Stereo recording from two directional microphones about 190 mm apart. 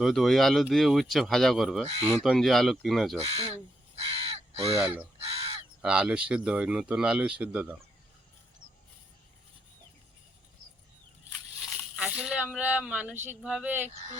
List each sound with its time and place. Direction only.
0.0 s speech: centre (ahead or behind)
3.2 s speech: 30° right (ahead or behind)
3.5 s crow: 30° right (ahead or behind)
5.8 s speech: 5° right (ahead or behind)
11.6 s a sound: 5° right (ahead or behind)
13.2 s speech: 5° right (ahead or behind)